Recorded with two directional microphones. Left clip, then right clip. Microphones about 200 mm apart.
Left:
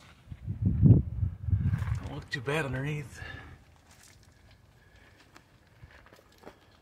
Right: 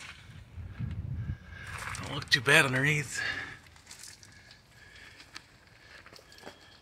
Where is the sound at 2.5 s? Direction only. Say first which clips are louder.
Right 9 dB; 10° right (ahead or behind).